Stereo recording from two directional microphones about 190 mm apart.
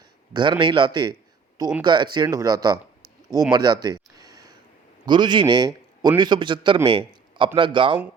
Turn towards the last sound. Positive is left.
turn(degrees=-25)  # may be behind; listen again after turning